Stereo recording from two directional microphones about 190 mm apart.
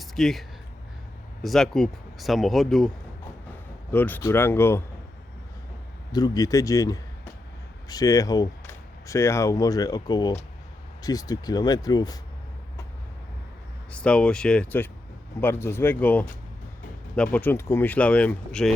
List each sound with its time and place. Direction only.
0.0 s speech: centre (ahead or behind)
3.9 s speech: 10° left (ahead or behind)
6.1 s speech: 20° left (ahead or behind)
13.9 s speech: 5° left (ahead or behind)